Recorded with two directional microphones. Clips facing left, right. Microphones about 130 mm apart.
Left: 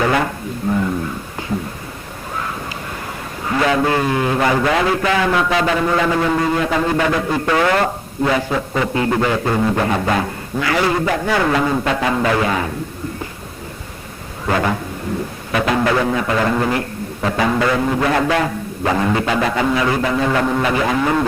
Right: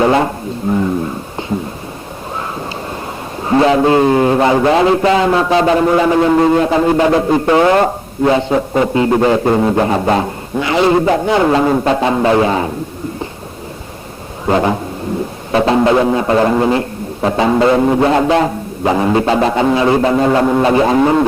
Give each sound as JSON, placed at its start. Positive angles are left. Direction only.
{"t": 0.0, "sound": "a sound", "side_deg": -25}
{"t": 0.7, "sound": "a man's voice", "side_deg": -25}
{"t": 1.4, "sound": "a sound", "side_deg": -25}
{"t": 3.4, "sound": "a man's voice", "side_deg": -30}
{"t": 14.4, "sound": "speech", "side_deg": -25}
{"t": 15.5, "sound": "music", "side_deg": -30}
{"t": 17.2, "sound": "a man's voice", "side_deg": -25}